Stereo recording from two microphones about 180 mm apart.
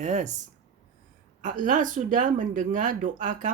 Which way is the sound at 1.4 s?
45° right (ahead or behind).